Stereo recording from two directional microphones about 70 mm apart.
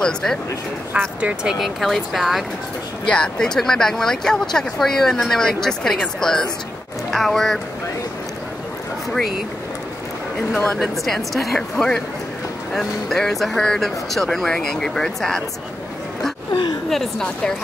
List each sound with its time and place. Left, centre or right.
0.0 s speech: centre
0.9 s speech: centre
1.6 s speech: centre
3.1 s speech: centre
10.5 s speech: centre
16.9 s speech: centre